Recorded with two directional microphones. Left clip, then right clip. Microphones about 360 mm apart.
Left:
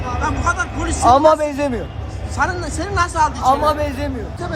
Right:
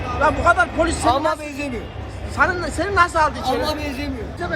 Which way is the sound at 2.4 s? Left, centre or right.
Centre.